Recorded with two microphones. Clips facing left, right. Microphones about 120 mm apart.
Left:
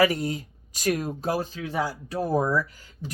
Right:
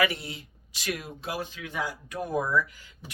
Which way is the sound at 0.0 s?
40° left (ahead or behind).